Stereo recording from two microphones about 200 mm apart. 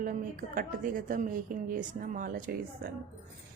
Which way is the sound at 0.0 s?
40° right (ahead or behind).